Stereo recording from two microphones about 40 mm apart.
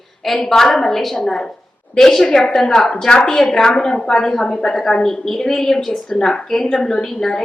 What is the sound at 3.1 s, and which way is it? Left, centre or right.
A woman's voice, left.